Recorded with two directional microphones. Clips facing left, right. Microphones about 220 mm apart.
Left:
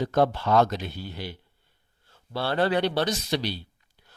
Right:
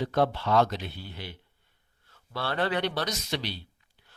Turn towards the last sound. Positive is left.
turn(degrees=35)  # may be behind; listen again after turning